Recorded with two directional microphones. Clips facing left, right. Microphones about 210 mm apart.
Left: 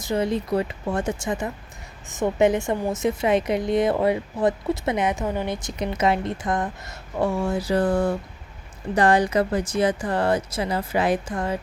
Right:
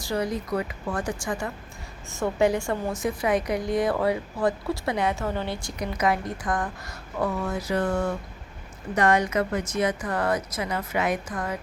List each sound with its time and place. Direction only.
0.0 s a woman's voice: 25° left (ahead or behind)